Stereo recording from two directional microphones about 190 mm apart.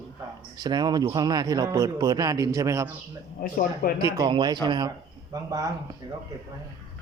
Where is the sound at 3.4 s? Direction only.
50° left (ahead or behind).